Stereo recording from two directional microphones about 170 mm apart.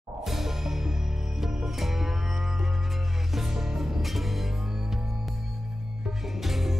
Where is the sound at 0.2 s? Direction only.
Centre (ahead or behind).